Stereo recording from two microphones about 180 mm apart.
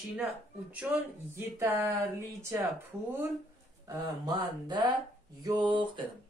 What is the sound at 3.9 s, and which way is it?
Speech, 25° right (ahead or behind).